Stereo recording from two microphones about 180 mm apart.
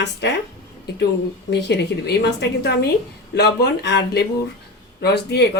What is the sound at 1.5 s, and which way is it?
Speech, 70° left (ahead or behind).